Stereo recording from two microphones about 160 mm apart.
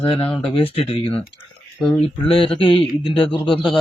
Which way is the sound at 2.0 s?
35° left (ahead or behind).